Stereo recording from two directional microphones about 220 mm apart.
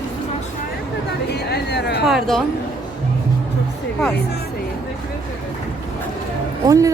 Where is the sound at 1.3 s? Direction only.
50° left (ahead or behind).